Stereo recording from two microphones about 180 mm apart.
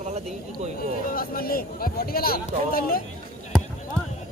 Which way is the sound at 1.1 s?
55° left (ahead or behind).